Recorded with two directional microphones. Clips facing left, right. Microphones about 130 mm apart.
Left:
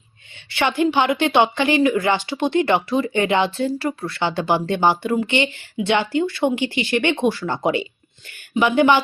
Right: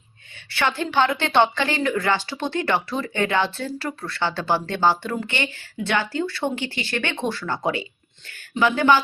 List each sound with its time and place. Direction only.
0.5 s speech: 15° left (ahead or behind)